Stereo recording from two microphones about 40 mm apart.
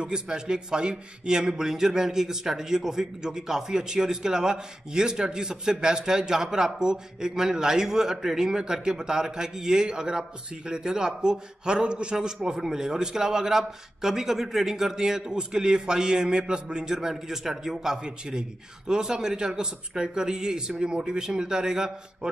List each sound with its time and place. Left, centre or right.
0.0 s a man's voice: right